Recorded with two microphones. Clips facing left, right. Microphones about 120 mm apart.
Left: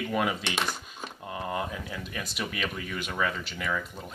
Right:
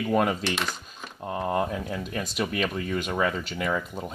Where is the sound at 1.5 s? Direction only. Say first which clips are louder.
Right 6 dB; 50° right (ahead or behind).